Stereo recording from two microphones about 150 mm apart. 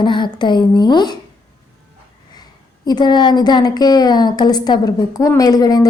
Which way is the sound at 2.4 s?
25° left (ahead or behind).